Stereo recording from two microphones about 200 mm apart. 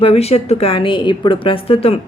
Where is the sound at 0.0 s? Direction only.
30° left (ahead or behind).